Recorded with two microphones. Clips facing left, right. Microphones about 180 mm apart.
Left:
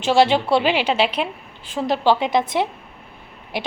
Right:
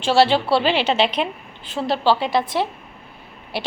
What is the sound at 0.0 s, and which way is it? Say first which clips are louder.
A woman's voice: even; 15° left (ahead or behind).